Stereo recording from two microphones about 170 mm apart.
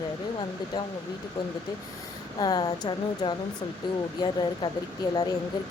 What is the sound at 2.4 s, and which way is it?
Speech, 25° left (ahead or behind).